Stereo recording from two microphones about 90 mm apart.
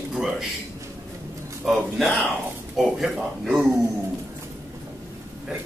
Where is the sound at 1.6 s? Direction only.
5° right (ahead or behind).